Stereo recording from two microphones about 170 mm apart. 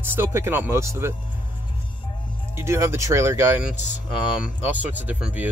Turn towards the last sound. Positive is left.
turn(degrees=-5)  # may be behind; listen again after turning